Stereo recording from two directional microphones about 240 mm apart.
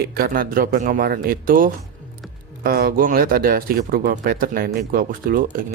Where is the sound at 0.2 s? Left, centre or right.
Right.